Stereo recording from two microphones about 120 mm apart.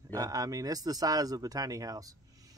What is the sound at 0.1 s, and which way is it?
A man's voice, 30° right (ahead or behind).